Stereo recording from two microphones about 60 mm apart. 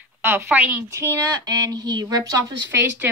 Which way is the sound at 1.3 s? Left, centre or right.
Right.